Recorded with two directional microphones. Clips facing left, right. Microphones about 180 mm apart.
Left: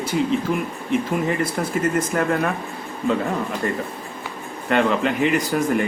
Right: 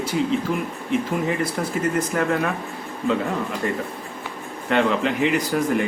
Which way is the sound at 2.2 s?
45° left (ahead or behind).